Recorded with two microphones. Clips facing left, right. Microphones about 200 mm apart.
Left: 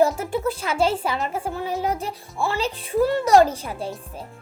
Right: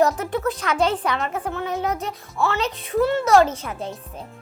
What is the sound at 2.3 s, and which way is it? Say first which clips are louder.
Music: right 3 dB; 15° left (ahead or behind).